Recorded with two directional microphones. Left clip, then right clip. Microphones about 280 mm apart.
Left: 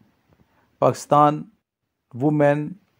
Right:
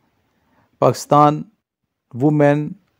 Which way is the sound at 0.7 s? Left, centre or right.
Right.